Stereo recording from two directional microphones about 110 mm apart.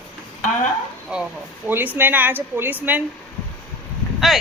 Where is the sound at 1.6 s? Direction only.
15° right (ahead or behind).